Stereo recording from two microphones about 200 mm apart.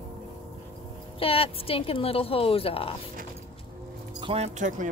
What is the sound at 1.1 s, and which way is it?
A woman's voice, 30° left (ahead or behind).